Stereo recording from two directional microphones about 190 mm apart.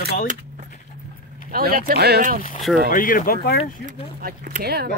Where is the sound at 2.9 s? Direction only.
45° left (ahead or behind).